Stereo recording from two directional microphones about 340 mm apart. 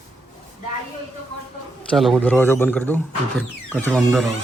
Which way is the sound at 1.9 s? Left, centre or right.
Centre.